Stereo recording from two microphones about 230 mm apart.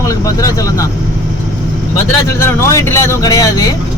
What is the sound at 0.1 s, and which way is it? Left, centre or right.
Speech, centre.